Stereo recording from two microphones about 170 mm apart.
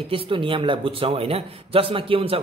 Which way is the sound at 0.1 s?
30° right (ahead or behind).